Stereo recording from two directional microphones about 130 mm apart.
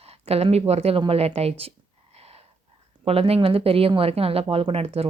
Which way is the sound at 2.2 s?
50° right (ahead or behind).